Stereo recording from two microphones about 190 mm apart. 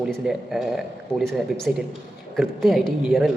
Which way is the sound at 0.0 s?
Centre (ahead or behind).